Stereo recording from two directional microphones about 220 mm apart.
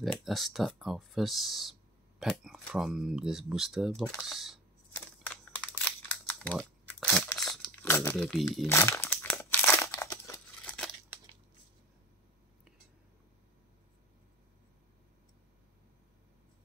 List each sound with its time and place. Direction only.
0.0 s speech: centre (ahead or behind)
5.3 s crumpling: 5° left (ahead or behind)